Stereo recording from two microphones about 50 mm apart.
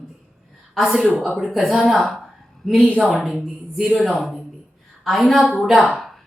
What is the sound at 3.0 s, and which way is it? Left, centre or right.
Speech, centre.